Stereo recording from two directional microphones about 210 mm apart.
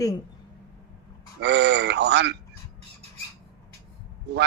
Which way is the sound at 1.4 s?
55° right (ahead or behind).